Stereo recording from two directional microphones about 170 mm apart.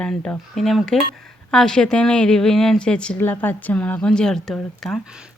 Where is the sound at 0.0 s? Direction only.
5° left (ahead or behind).